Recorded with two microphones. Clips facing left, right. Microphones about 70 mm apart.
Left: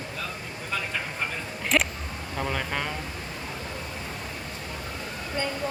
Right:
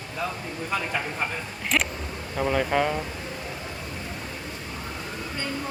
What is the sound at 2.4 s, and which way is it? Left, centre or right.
Speech, centre.